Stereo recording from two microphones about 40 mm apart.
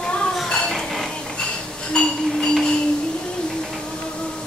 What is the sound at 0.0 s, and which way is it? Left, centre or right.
Dishes, left.